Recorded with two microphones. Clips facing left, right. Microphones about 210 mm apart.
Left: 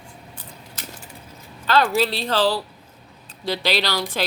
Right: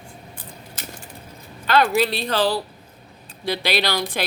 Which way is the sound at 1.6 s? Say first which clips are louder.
Right 1 dB; 15° right (ahead or behind).